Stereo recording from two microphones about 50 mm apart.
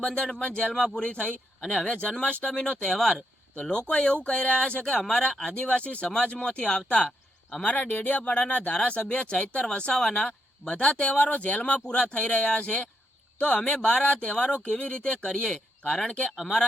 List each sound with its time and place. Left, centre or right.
0.0 s speech: centre
3.7 s speech: left